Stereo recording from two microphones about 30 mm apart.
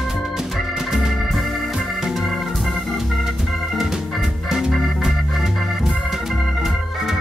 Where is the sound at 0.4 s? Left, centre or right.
Centre.